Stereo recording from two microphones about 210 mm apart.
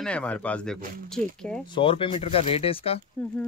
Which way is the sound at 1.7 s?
25° left (ahead or behind).